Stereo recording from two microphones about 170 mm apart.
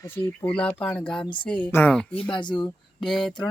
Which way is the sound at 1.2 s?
30° left (ahead or behind).